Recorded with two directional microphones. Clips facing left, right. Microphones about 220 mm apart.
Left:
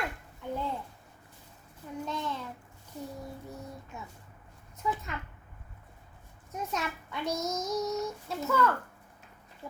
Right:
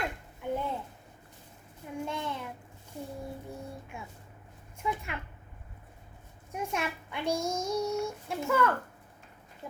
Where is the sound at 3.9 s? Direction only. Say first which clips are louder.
Right 1 dB; 10° right (ahead or behind).